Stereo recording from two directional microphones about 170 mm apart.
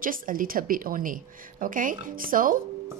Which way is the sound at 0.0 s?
55° right (ahead or behind).